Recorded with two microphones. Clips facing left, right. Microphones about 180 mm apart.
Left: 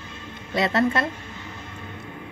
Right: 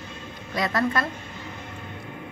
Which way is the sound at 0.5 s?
25° left (ahead or behind).